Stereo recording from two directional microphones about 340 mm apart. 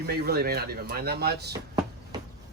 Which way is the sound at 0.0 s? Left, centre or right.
Right.